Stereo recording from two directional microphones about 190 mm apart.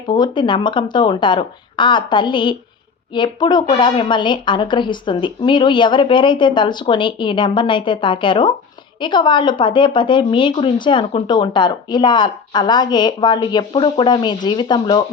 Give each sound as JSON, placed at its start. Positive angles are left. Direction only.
{"t": 0.1, "sound": "a woman's voice", "side_deg": 25}